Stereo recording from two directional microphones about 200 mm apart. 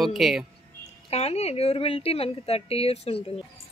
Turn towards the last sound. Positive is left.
turn(degrees=30)  # may be behind; listen again after turning